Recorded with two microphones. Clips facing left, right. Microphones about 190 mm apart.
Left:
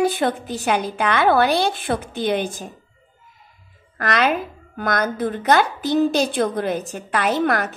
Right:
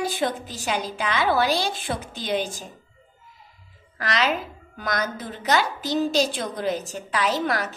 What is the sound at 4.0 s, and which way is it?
A woman's voice, 55° left (ahead or behind).